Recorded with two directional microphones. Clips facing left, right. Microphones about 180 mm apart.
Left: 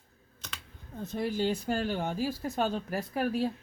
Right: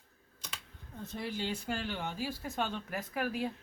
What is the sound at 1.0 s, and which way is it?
Speech, 45° left (ahead or behind).